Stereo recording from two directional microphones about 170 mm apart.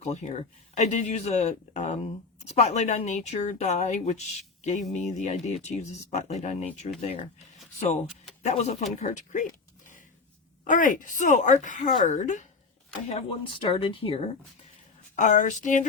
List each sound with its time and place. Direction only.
0.0 s a woman's voice: 40° left (ahead or behind)
8.4 s a woman's voice: 40° left (ahead or behind)
10.6 s speech: 50° left (ahead or behind)
13.1 s a woman's voice: 35° left (ahead or behind)
15.1 s speech: 45° left (ahead or behind)